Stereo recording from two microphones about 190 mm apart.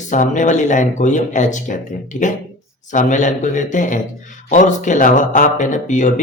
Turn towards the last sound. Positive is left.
turn(degrees=40)  # may be behind; listen again after turning